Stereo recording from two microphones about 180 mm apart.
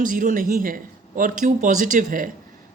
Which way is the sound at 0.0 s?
50° right (ahead or behind).